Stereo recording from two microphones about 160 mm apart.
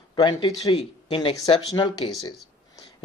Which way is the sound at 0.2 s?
30° left (ahead or behind).